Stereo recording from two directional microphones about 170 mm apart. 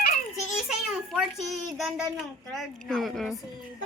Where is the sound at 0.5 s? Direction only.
5° right (ahead or behind).